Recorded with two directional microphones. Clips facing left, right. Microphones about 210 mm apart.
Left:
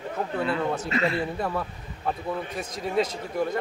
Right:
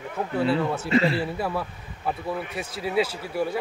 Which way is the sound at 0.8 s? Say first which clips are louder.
Right 4 dB; 30° right (ahead or behind).